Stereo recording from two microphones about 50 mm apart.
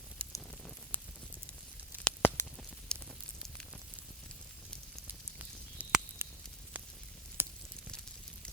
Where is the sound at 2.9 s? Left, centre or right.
Centre.